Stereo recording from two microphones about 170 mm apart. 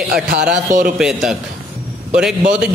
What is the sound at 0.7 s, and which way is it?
Speech, 50° right (ahead or behind).